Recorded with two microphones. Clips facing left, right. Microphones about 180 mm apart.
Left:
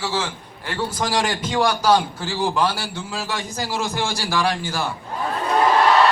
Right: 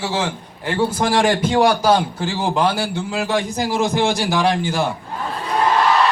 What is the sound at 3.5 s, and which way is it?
A man's voice, 20° right (ahead or behind).